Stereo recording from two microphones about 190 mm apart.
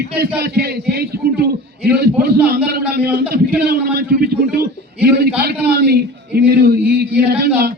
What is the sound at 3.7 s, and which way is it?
Speech, 55° right (ahead or behind).